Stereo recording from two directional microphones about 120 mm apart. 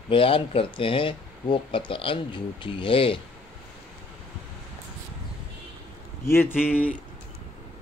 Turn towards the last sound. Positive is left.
turn(degrees=15)  # may be behind; listen again after turning